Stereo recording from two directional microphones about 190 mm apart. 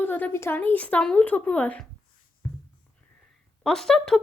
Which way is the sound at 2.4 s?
15° left (ahead or behind).